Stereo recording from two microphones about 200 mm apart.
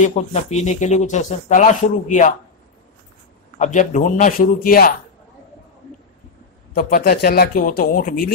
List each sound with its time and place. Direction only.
0.0 s speech: 35° left (ahead or behind)
3.5 s speech: 35° left (ahead or behind)
6.7 s speech: 45° left (ahead or behind)